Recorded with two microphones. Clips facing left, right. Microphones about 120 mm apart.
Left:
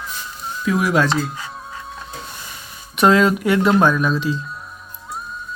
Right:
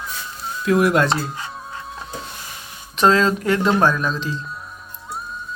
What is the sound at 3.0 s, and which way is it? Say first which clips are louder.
Speech: left 2 dB; 10° left (ahead or behind).